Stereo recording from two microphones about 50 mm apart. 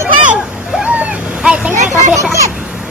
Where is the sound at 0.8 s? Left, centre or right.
Right.